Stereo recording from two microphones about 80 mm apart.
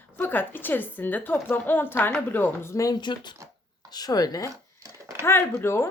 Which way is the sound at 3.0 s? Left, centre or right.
Left.